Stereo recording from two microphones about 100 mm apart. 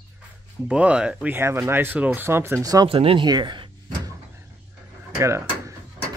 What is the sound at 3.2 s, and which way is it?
Speech, 50° right (ahead or behind).